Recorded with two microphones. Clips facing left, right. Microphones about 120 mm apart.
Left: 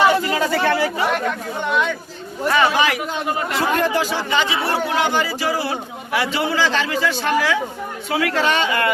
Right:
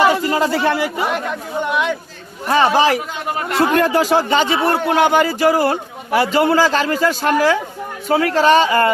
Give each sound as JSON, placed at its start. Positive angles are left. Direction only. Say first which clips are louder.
{"t": 0.3, "sound": "a sound", "louder": "right 3 dB", "side_deg": -30}
{"t": 1.1, "sound": "speech", "louder": "right 1 dB", "side_deg": -5}
{"t": 2.5, "sound": "speech", "louder": "right 4 dB", "side_deg": -35}
{"t": 3.8, "sound": "a man's voice", "louder": "right 5 dB", "side_deg": -50}